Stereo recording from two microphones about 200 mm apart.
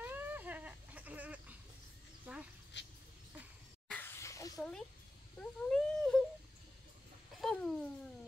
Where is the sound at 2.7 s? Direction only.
60° left (ahead or behind).